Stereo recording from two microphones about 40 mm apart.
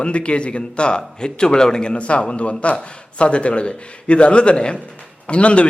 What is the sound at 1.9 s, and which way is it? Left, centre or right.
A man's voice, left.